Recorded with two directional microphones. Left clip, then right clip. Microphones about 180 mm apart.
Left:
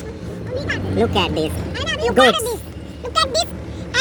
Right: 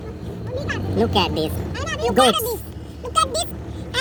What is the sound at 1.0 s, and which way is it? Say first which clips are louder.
Speech: left 1 dB; 10° right (ahead or behind).